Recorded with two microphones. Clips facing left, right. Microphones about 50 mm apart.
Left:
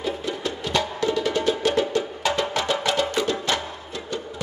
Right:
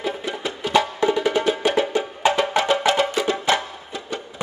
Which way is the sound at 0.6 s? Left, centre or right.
Centre.